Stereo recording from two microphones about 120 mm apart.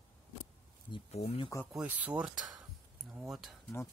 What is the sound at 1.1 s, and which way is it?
Speech, 60° left (ahead or behind).